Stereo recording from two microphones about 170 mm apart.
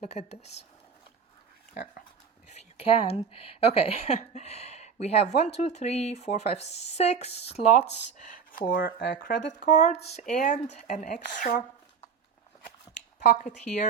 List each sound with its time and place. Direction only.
0.0 s speech: 40° left (ahead or behind)
1.7 s speech: 75° left (ahead or behind)
2.6 s speech: 35° left (ahead or behind)
8.4 s speech: 60° left (ahead or behind); by 9.1 s 75° left (ahead or behind)
9.2 s speech: 50° left (ahead or behind)
13.3 s speech: 50° left (ahead or behind)